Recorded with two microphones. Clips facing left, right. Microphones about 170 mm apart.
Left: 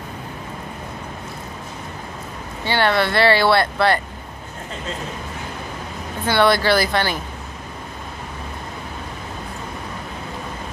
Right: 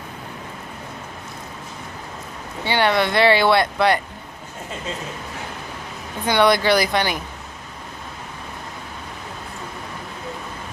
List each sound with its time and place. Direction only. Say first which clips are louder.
2.6 s speech: even; 15° right (ahead or behind)
6.2 s speech: even; 15° right (ahead or behind)